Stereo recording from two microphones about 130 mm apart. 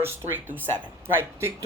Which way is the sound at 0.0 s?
20° right (ahead or behind).